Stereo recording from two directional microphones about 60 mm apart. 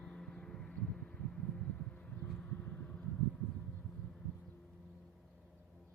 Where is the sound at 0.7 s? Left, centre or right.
Centre.